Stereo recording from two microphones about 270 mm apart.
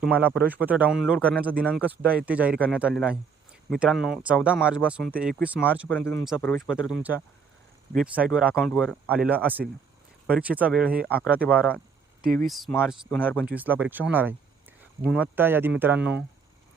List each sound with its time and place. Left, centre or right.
0.0 s speech: centre
5.9 s speech: centre
12.2 s speech: right
12.5 s speech: centre